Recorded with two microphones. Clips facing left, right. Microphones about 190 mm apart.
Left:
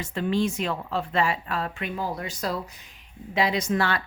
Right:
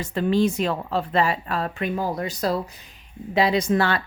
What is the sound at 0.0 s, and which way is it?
A woman's voice, 40° right (ahead or behind).